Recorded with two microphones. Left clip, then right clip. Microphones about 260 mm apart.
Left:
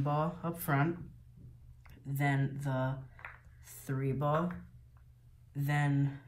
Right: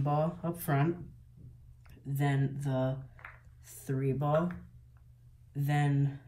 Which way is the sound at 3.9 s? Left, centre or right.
Centre.